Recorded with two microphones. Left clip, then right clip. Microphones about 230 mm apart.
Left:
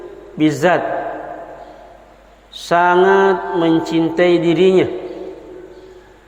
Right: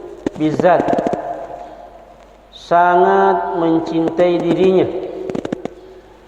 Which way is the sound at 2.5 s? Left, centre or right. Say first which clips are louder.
Right 1 dB; left.